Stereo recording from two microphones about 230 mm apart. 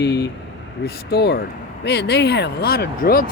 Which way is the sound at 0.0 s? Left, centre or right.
Left.